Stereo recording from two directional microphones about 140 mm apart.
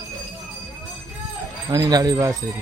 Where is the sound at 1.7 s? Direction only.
25° right (ahead or behind).